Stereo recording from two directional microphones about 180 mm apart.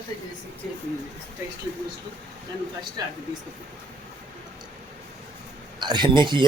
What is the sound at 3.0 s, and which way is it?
Speech, 20° right (ahead or behind).